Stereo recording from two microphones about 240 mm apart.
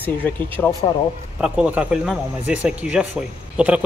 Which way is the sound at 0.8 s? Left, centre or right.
Left.